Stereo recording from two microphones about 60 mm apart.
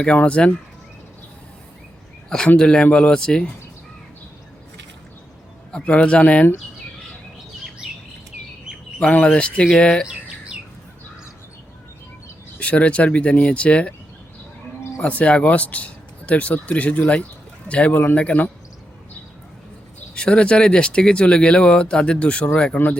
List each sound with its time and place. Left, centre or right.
0.0 s speech: centre
2.6 s speech: centre
5.7 s speech: left
9.0 s speech: left
10.1 s bird: centre
12.5 s speech: left
15.0 s speech: left
20.1 s speech: centre